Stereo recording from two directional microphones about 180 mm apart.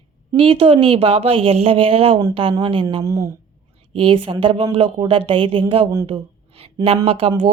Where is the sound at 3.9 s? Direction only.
30° right (ahead or behind).